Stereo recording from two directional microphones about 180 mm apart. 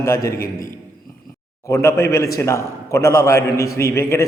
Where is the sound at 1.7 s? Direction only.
15° left (ahead or behind).